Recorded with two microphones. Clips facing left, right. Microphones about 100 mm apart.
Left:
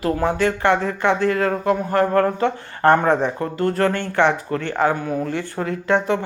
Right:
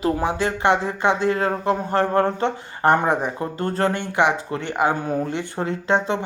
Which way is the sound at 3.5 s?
25° right (ahead or behind).